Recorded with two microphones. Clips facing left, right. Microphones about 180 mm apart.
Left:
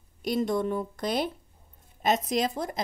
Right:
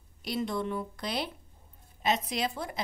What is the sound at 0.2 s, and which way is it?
Speech, 45° left (ahead or behind).